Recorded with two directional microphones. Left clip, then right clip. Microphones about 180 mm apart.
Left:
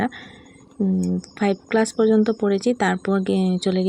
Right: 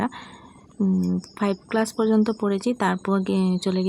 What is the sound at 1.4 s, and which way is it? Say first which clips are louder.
Speech: left 4 dB; 10° left (ahead or behind).